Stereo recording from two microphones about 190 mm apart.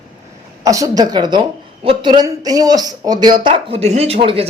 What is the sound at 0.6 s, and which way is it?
Speech, 20° right (ahead or behind).